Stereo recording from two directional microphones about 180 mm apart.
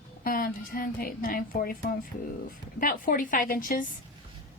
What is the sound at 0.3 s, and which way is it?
A woman's voice, 55° left (ahead or behind).